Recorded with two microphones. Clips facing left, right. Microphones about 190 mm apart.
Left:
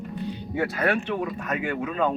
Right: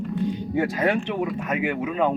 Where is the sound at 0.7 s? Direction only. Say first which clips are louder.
Right 2 dB; 15° right (ahead or behind).